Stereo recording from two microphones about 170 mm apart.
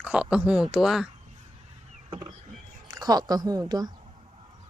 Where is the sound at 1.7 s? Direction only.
40° right (ahead or behind).